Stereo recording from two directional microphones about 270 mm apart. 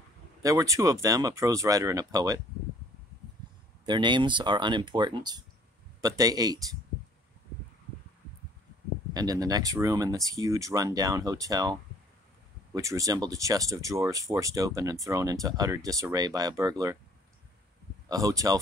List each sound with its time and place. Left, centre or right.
0.4 s speech: centre
3.8 s speech: centre
9.1 s speech: centre
18.0 s speech: centre